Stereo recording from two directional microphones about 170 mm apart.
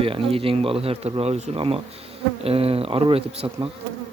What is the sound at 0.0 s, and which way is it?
Speech, 30° right (ahead or behind).